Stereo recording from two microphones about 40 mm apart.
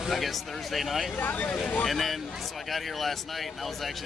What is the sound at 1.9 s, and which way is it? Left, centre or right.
Speech, centre.